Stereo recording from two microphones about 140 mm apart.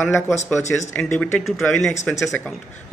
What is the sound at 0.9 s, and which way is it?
Speech, 10° left (ahead or behind).